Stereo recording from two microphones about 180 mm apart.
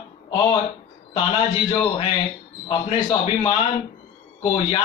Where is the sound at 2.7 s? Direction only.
30° left (ahead or behind).